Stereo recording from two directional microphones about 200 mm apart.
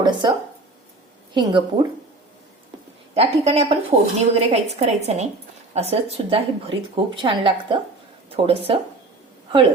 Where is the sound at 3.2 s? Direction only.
30° right (ahead or behind).